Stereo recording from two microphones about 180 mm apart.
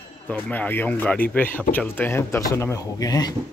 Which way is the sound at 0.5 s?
10° left (ahead or behind).